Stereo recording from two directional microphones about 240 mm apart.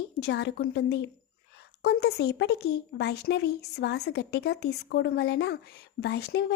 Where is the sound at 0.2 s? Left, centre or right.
Left.